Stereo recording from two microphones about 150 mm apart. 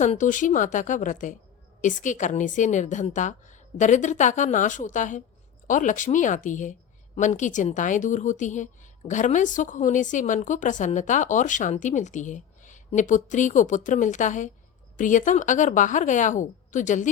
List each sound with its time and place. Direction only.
0.0 s a woman's voice: 55° left (ahead or behind)